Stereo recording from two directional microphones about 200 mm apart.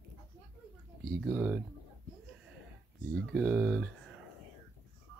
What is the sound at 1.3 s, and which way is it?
Speech, 10° right (ahead or behind).